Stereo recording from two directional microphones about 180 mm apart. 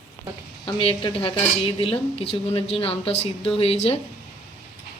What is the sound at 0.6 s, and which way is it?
A woman's voice, 30° left (ahead or behind).